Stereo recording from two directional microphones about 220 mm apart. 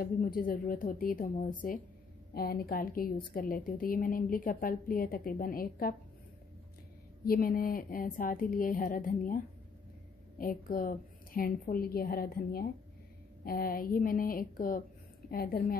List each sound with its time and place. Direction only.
0.0 s a woman's voice: 40° left (ahead or behind)
2.3 s a woman's voice: 45° left (ahead or behind)
7.2 s a woman's voice: 40° left (ahead or behind)